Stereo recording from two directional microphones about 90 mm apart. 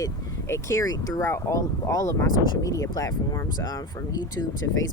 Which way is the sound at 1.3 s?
30° left (ahead or behind).